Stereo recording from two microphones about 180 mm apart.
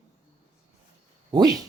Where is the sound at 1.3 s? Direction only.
20° right (ahead or behind).